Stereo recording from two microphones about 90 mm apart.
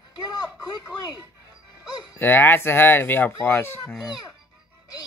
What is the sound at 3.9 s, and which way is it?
Speech, 5° right (ahead or behind).